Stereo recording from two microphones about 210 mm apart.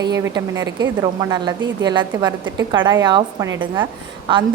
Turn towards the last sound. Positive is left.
turn(degrees=-25)  # may be behind; listen again after turning